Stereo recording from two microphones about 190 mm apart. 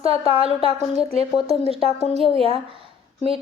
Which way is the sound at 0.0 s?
30° right (ahead or behind).